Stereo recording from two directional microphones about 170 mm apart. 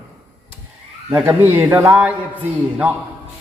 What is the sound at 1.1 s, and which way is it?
A man's voice, 10° right (ahead or behind).